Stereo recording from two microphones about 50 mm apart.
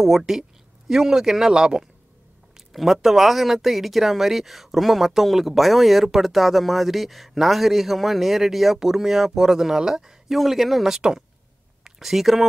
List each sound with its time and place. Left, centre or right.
0.0 s speech: centre
11.0 s speech: centre